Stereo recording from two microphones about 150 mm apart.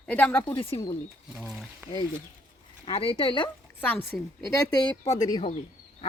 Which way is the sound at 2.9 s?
40° left (ahead or behind).